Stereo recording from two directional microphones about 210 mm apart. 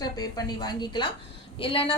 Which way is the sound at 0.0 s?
20° left (ahead or behind).